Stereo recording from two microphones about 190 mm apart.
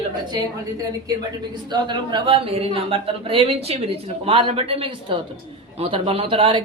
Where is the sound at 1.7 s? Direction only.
25° right (ahead or behind).